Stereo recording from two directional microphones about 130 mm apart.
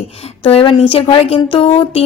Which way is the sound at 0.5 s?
45° left (ahead or behind).